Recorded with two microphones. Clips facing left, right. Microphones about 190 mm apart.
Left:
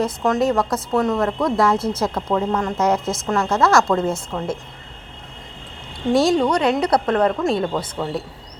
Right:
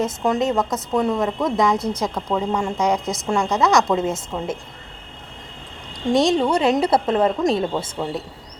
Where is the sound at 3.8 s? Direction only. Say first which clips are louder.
Left 1 dB; 5° right (ahead or behind).